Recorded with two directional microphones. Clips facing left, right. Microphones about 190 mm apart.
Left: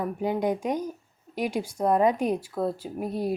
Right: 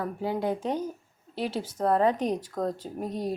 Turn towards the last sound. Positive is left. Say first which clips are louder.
# left 2 dB
turn(degrees=10)  # may be behind; listen again after turning